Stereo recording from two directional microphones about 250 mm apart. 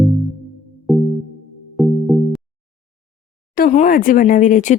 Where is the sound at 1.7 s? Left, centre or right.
Centre.